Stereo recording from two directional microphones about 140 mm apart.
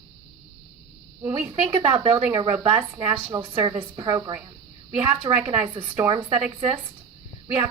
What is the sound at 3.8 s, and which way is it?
Speech, 30° right (ahead or behind).